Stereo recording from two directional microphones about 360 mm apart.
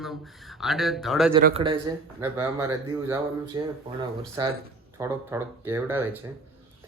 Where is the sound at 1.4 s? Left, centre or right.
Right.